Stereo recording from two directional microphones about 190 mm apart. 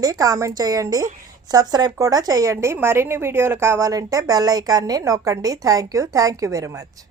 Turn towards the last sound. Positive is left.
turn(degrees=-15)  # may be behind; listen again after turning